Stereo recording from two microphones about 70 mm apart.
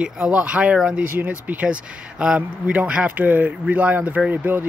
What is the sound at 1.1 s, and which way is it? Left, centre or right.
Speech, right.